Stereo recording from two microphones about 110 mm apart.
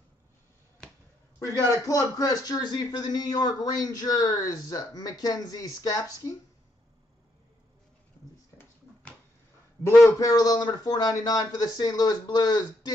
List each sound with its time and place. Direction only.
1.8 s a man's voice: 30° left (ahead or behind)
9.8 s a man's voice: 30° left (ahead or behind)